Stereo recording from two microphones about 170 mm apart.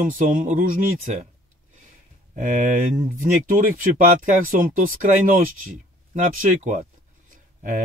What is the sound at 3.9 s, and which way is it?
Speech, 55° right (ahead or behind).